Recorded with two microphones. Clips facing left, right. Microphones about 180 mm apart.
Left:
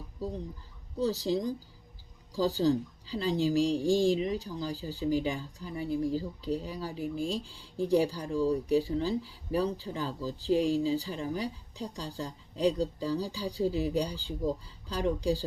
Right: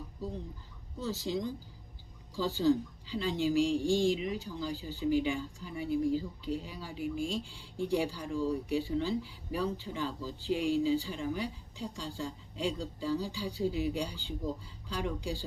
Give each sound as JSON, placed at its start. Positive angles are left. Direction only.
{"t": 0.9, "sound": "a woman's voice", "side_deg": 35}